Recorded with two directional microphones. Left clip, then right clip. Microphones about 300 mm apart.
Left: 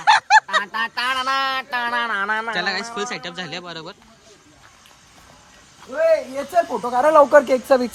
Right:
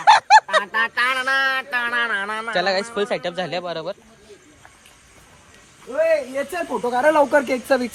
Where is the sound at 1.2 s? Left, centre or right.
Left.